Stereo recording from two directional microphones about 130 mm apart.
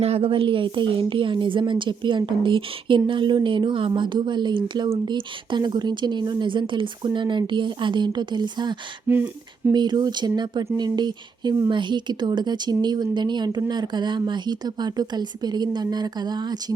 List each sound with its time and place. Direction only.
0.0 s a woman's voice: 45° right (ahead or behind)
9.0 s speech: 15° right (ahead or behind)
9.7 s a woman's voice: 35° right (ahead or behind)